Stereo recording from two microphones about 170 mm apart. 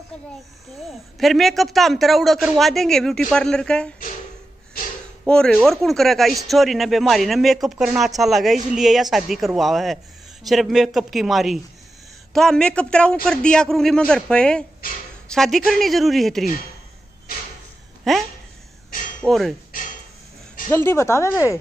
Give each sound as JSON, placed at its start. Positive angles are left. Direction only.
{"t": 1.2, "sound": "speech", "side_deg": 0}
{"t": 5.2, "sound": "speech", "side_deg": 5}
{"t": 14.8, "sound": "a woman's voice", "side_deg": 55}
{"t": 15.3, "sound": "speech", "side_deg": 0}
{"t": 18.1, "sound": "speech", "side_deg": 0}
{"t": 19.2, "sound": "speech", "side_deg": 0}
{"t": 20.7, "sound": "speech", "side_deg": 15}